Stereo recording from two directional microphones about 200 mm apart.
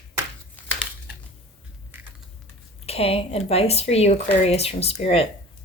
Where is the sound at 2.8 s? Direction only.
30° left (ahead or behind).